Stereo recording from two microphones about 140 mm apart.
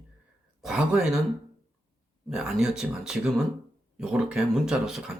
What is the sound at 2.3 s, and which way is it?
Speech, 5° right (ahead or behind).